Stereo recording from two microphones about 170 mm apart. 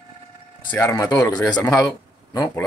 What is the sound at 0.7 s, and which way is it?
Speech, 15° left (ahead or behind).